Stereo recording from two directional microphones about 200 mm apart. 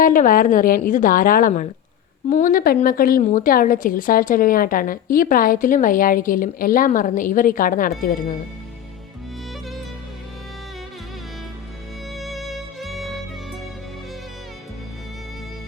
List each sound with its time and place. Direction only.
0.0 s a woman's voice: 40° left (ahead or behind)
12.1 s music: centre (ahead or behind)